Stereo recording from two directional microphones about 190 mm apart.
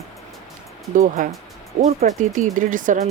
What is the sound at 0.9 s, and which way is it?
Speech, 45° right (ahead or behind).